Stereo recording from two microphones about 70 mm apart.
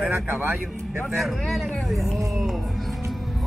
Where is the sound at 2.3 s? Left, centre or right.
Centre.